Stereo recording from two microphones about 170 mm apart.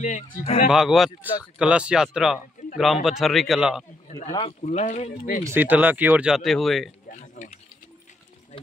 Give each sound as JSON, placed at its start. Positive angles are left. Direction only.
{"t": 0.0, "sound": "speech", "side_deg": 50}
{"t": 0.7, "sound": "speech", "side_deg": 0}
{"t": 4.3, "sound": "speech", "side_deg": 30}
{"t": 5.4, "sound": "speech", "side_deg": -10}
{"t": 7.1, "sound": "a sound", "side_deg": 45}